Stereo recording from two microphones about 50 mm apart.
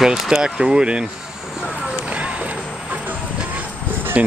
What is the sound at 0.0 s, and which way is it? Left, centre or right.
Speech, centre.